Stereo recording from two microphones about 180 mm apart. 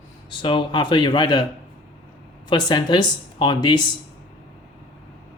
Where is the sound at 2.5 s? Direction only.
25° left (ahead or behind).